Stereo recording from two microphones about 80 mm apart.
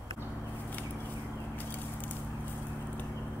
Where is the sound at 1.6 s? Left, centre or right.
Left.